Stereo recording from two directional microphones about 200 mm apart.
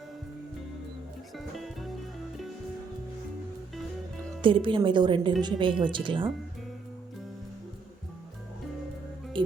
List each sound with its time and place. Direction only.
1.4 s music: centre (ahead or behind)
4.4 s speech: 25° right (ahead or behind)